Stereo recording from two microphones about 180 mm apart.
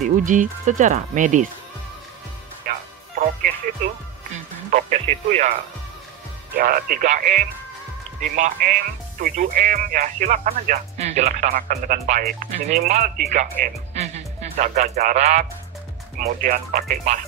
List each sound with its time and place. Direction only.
0.0 s speech: 45° right (ahead or behind)
2.7 s music: 50° right (ahead or behind)
4.3 s music: 40° right (ahead or behind)
6.5 s speech: 55° right (ahead or behind)
7.1 s music: 40° right (ahead or behind)
8.2 s speech: 45° right (ahead or behind)
12.5 s music: 40° right (ahead or behind)
13.3 s speech: 40° right (ahead or behind)
16.2 s speech: 55° right (ahead or behind)